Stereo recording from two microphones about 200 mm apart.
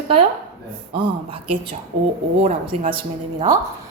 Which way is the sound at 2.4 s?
30° right (ahead or behind).